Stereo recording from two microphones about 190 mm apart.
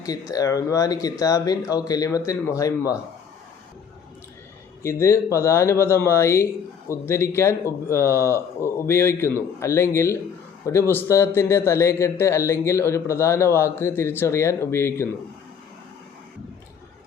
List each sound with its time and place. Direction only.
0.0 s speech: 20° left (ahead or behind)
4.8 s speech: 15° left (ahead or behind)